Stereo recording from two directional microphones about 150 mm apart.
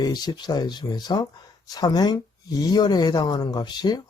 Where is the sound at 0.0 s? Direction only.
25° left (ahead or behind).